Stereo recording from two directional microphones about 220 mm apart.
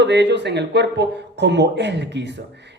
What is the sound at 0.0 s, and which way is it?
Speech, 50° right (ahead or behind).